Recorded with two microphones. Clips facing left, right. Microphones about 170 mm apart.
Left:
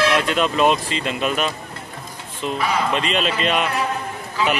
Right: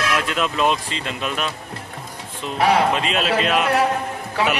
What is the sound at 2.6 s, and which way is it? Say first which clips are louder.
Speech: right 6 dB; 70° right (ahead or behind).